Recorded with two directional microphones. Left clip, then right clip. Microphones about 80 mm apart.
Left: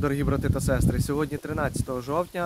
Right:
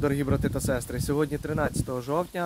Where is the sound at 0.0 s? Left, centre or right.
Left.